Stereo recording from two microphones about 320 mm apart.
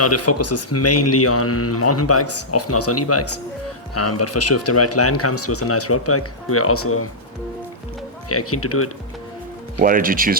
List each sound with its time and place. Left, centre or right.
0.0 s a man's voice: left
8.3 s a man's voice: left
9.8 s speech: right